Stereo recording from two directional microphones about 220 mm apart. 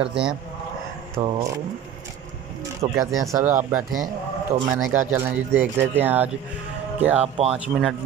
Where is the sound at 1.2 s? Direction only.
25° right (ahead or behind).